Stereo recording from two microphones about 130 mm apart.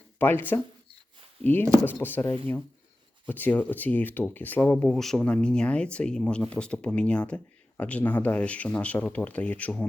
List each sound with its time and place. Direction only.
0.2 s speech: 15° left (ahead or behind)